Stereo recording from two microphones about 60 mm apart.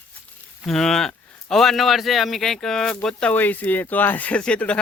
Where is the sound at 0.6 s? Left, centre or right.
Centre.